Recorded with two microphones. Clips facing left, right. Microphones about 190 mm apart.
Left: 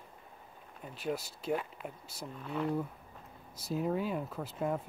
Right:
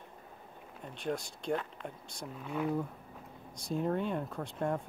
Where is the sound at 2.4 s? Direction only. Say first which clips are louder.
Even; 5° right (ahead or behind).